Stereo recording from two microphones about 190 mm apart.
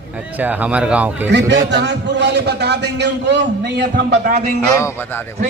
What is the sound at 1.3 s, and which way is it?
A man's voice, 65° right (ahead or behind).